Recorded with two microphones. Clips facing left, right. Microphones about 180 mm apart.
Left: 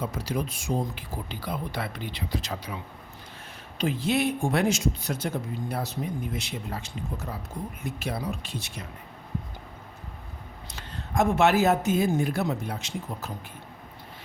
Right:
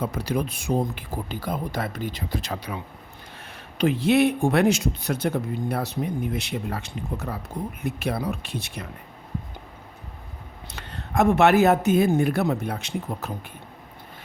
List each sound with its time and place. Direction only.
0.0 s speech: 60° right (ahead or behind)
3.8 s speech: 65° right (ahead or behind)
10.7 s speech: 60° right (ahead or behind)